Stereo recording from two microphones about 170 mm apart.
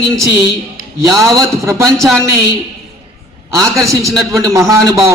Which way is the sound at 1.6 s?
15° right (ahead or behind).